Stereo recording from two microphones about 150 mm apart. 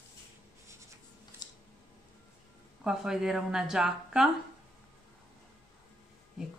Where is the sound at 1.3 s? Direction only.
15° right (ahead or behind).